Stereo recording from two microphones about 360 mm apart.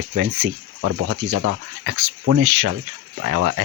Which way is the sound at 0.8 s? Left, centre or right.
Right.